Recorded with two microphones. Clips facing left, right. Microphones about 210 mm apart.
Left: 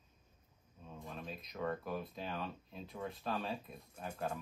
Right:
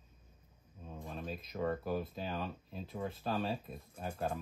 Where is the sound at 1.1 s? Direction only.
Centre (ahead or behind).